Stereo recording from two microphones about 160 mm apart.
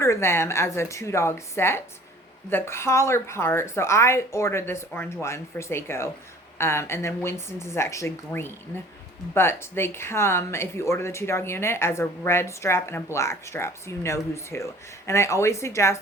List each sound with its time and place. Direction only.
0.0 s speech: 15° left (ahead or behind)